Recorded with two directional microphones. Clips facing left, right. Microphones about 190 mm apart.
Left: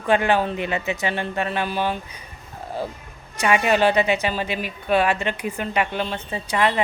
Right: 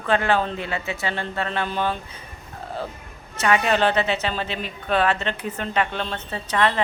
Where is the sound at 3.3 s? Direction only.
15° left (ahead or behind).